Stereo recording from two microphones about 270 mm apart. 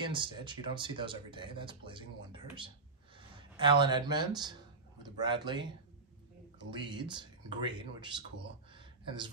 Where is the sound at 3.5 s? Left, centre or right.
Centre.